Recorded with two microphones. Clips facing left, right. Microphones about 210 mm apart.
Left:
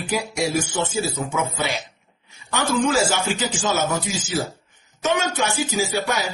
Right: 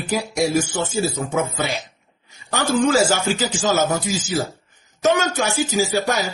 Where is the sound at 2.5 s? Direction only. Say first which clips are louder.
Right 3 dB; 35° right (ahead or behind).